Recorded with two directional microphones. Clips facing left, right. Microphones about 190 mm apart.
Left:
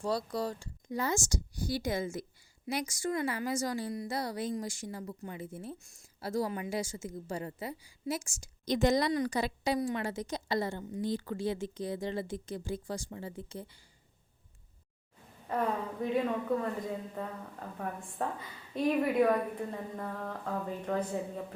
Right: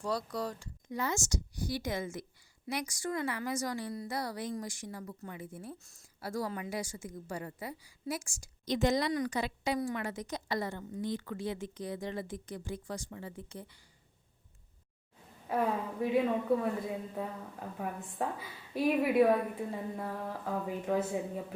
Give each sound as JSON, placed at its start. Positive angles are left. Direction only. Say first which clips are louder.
{"t": 0.0, "sound": "speech", "louder": "left 2 dB", "side_deg": 30}
{"t": 8.6, "sound": "a woman's voice", "louder": "left 2 dB", "side_deg": 45}
{"t": 15.4, "sound": "a woman's voice", "louder": "right 1 dB", "side_deg": -5}